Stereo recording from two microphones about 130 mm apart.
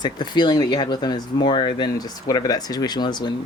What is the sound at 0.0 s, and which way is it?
Speech, 35° left (ahead or behind).